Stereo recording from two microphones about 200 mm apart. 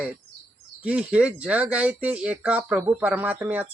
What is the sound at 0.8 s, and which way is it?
Speech, 5° right (ahead or behind).